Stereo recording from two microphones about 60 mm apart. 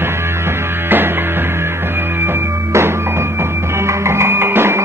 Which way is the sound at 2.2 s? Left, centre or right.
Right.